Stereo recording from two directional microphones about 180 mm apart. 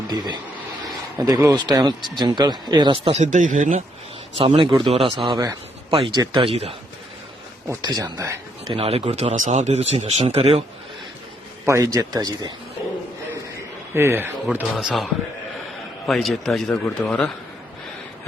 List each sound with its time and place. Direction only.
1.2 s speech: 20° right (ahead or behind); by 3.8 s 40° right (ahead or behind)
4.4 s speech: 30° right (ahead or behind)
7.7 s speech: 20° right (ahead or behind)
8.6 s speech: 30° right (ahead or behind)
11.6 s speech: 15° right (ahead or behind)
13.9 s speech: 15° right (ahead or behind); by 17.3 s 5° left (ahead or behind)